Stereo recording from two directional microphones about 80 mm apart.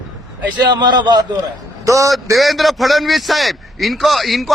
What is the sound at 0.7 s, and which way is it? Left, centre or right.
Speech, right.